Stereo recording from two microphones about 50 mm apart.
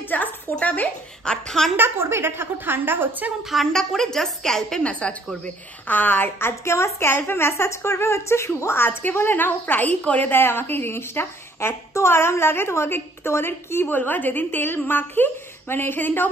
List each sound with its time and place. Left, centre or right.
0.1 s a sound: left
1.2 s a woman's voice: centre
1.8 s a woman's voice: right
3.7 s a woman's voice: centre
5.0 s a woman's voice: left
5.9 s a woman's voice: left
6.4 s a woman's voice: left
7.2 s a woman's voice: left
8.7 s a woman's voice: left
10.0 s a woman's voice: left
10.3 s a woman's voice: left
13.8 s a woman's voice: left